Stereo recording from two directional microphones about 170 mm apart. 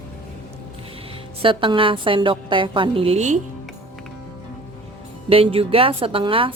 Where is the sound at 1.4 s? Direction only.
30° right (ahead or behind).